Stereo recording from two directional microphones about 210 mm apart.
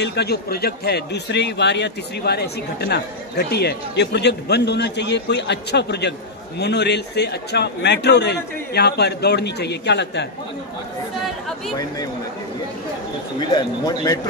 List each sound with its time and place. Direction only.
0.0 s speech: 50° left (ahead or behind)
13.5 s a man's voice: 20° left (ahead or behind)